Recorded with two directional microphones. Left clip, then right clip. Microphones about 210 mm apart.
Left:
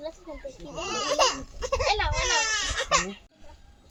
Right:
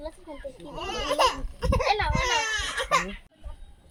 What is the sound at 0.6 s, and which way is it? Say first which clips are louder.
Speech: left 2 dB; 25° right (ahead or behind).